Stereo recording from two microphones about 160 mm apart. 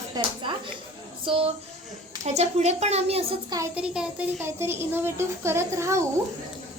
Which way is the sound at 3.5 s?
15° right (ahead or behind).